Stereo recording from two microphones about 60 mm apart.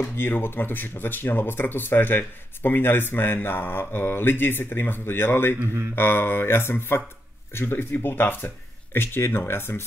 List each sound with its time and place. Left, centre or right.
0.2 s speech: left
5.6 s speech: right
5.9 s speech: left